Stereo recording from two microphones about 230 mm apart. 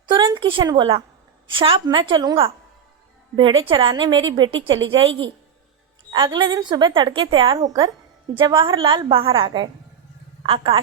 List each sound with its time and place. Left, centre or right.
0.0 s a woman's voice: centre
3.6 s a woman's voice: right